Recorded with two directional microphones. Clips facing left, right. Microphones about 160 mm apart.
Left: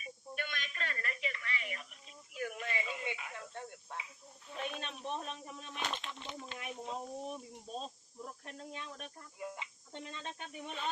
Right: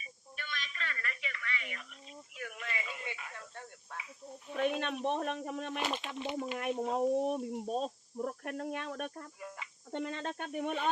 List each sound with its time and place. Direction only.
0.0 s a sound: 50° left (ahead or behind); by 4.0 s 20° left (ahead or behind)
4.8 s speech: 60° right (ahead or behind)
5.8 s speech: 5° right (ahead or behind)
6.6 s speech: 55° right (ahead or behind)
9.4 s cricket: 20° left (ahead or behind)
9.9 s speech: 60° right (ahead or behind)